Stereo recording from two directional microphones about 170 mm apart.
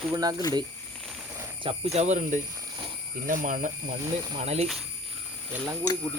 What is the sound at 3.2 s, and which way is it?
Speech, 50° right (ahead or behind).